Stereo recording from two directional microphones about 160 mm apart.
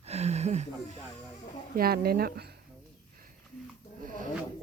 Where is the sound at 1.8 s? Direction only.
70° right (ahead or behind).